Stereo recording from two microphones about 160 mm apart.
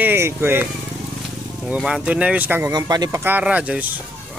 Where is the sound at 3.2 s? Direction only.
10° right (ahead or behind).